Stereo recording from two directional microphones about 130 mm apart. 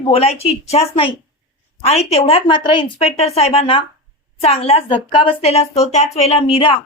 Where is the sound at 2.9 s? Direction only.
55° left (ahead or behind).